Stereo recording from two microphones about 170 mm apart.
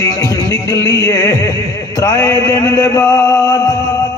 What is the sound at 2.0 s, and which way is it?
A man's voice, 20° left (ahead or behind).